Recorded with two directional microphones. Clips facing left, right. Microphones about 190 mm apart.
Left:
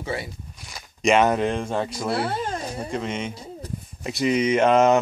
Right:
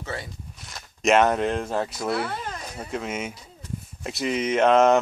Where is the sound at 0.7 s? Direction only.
Centre (ahead or behind).